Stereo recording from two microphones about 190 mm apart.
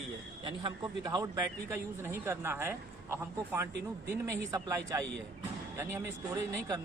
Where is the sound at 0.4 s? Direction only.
20° right (ahead or behind).